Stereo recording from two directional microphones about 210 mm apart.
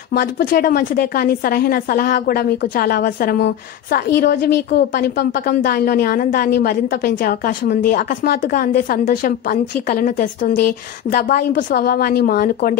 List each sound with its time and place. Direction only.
0.1 s a woman's voice: 40° left (ahead or behind)